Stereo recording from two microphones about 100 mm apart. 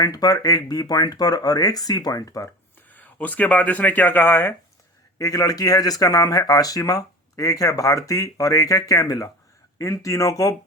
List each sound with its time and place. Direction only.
0.0 s speech: 40° left (ahead or behind)
2.9 s speech: 15° left (ahead or behind)
5.1 s speech: 35° left (ahead or behind)